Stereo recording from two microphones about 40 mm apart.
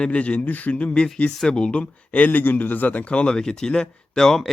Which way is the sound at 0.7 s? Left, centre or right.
Left.